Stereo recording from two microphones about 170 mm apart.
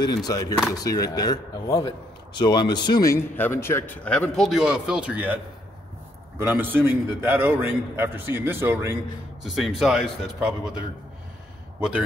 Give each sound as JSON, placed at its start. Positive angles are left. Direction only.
{"t": 0.0, "sound": "a man's voice", "side_deg": 25}
{"t": 9.4, "sound": "speech", "side_deg": 0}